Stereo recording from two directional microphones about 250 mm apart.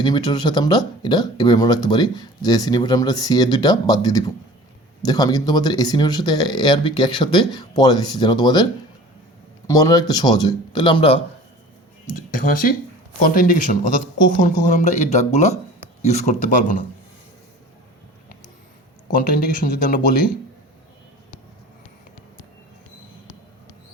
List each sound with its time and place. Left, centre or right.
0.0 s speech: centre
9.6 s speech: centre
12.1 s speech: left
19.6 s speech: left